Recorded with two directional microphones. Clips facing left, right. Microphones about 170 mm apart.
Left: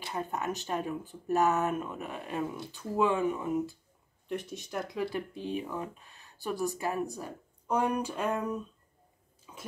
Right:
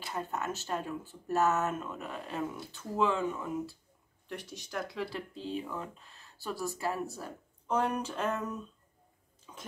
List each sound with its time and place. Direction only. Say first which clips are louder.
0.0 s speech: left 2 dB; 15° left (ahead or behind)
2.3 s speech: left 3 dB; centre (ahead or behind)
2.7 s speech: left 2 dB; 15° left (ahead or behind)
9.5 s bathtub: left 1 dB; 5° left (ahead or behind)